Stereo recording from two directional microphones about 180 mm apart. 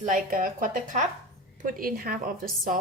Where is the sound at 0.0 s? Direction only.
45° right (ahead or behind).